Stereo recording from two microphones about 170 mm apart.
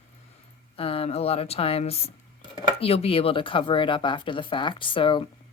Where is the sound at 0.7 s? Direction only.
35° left (ahead or behind).